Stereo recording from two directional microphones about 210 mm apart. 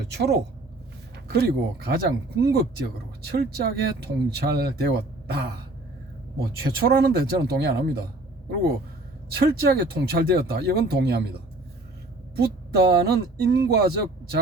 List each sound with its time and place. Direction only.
0.1 s speech: 50° right (ahead or behind)
6.7 s speech: 45° right (ahead or behind)
9.3 s speech: 45° right (ahead or behind)
12.4 s speech: 50° right (ahead or behind)